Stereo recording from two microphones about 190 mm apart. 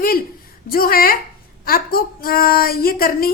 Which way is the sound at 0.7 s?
50° left (ahead or behind).